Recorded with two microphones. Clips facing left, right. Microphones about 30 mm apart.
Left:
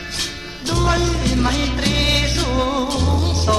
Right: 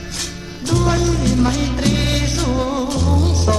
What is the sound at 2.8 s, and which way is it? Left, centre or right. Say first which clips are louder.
Music: even; left.